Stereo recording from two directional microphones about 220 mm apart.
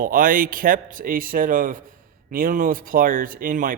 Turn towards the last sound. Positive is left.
turn(degrees=-40)  # may be behind; listen again after turning